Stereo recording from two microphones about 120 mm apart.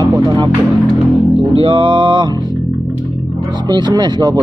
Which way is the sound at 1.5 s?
50° right (ahead or behind).